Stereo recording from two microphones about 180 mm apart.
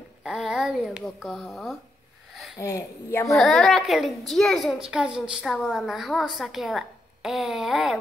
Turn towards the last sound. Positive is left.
turn(degrees=0)  # may be behind; listen again after turning